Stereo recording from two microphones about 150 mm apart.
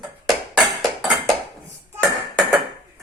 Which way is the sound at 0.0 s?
Centre (ahead or behind).